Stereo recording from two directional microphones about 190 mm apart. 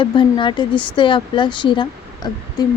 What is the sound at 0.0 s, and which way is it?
Speech, 25° left (ahead or behind).